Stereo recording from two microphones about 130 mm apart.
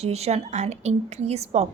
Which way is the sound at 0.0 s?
55° right (ahead or behind).